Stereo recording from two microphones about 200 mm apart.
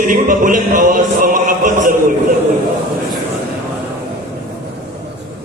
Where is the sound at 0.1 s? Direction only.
40° right (ahead or behind).